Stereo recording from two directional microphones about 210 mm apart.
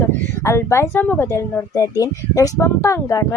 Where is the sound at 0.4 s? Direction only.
15° left (ahead or behind).